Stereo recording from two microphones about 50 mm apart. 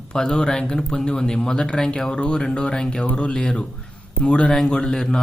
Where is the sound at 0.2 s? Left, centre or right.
Centre.